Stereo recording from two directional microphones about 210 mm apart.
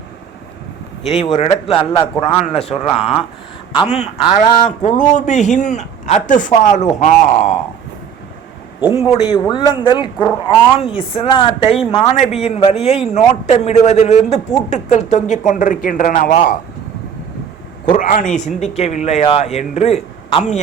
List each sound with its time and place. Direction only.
1.1 s a man's voice: 30° left (ahead or behind)
9.3 s a man's voice: 20° left (ahead or behind); by 16.6 s 40° left (ahead or behind)
17.9 s a man's voice: 40° left (ahead or behind)